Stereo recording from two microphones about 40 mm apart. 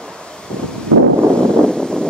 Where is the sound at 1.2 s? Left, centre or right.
Left.